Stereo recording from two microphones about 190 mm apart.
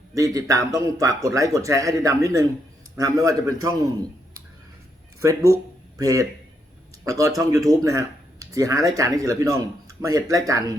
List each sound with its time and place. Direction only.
0.1 s speech: 15° right (ahead or behind)
5.2 s speech: 15° right (ahead or behind)